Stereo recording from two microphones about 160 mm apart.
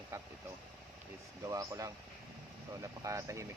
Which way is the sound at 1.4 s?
20° right (ahead or behind).